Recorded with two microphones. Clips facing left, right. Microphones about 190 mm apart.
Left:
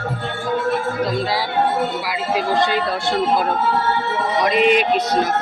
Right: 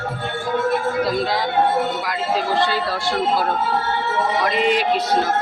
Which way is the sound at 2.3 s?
15° left (ahead or behind).